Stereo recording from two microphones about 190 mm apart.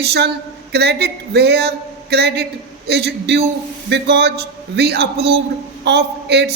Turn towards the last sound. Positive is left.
turn(degrees=-60)  # may be behind; listen again after turning